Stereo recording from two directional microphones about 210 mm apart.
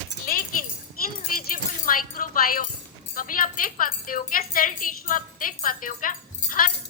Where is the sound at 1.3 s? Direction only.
40° left (ahead or behind).